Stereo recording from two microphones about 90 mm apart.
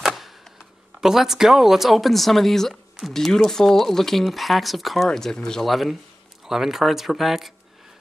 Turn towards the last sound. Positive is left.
turn(degrees=0)  # may be behind; listen again after turning